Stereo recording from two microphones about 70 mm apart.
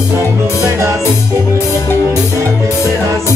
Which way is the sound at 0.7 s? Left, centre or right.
Right.